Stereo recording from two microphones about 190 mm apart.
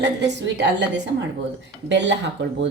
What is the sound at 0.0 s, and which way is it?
Speech, 65° right (ahead or behind).